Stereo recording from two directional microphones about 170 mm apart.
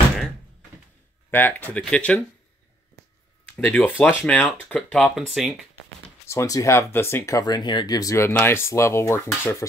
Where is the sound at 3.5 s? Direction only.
10° left (ahead or behind).